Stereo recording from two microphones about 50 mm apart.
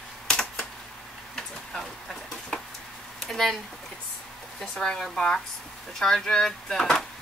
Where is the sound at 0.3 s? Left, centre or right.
Centre.